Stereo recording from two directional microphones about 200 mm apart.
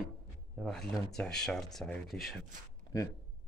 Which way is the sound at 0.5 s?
Centre (ahead or behind).